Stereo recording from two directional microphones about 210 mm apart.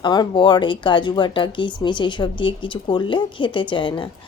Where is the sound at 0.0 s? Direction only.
20° left (ahead or behind).